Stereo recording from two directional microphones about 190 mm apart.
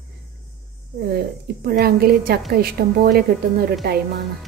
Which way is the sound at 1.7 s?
55° right (ahead or behind).